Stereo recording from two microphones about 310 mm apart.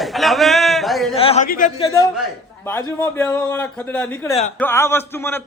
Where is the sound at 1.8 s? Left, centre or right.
Centre.